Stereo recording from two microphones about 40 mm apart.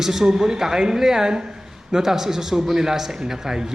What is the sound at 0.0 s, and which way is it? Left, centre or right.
A man's voice, centre.